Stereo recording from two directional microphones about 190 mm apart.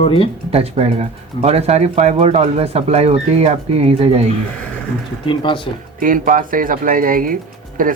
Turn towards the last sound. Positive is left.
turn(degrees=-45)  # may be behind; listen again after turning